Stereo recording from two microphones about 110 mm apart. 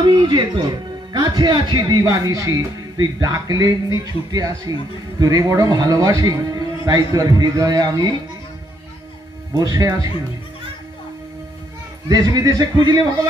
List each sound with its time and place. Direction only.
0.0 s speech: 45° right (ahead or behind)
9.6 s speech: 30° right (ahead or behind)
12.1 s speech: 35° right (ahead or behind)